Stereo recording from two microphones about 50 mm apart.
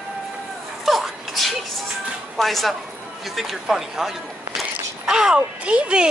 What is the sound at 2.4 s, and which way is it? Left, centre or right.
Speech, centre.